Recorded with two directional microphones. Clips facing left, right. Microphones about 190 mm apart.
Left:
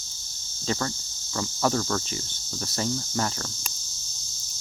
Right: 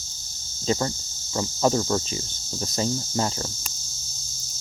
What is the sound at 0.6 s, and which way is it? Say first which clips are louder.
Speech: right 4 dB; 20° right (ahead or behind).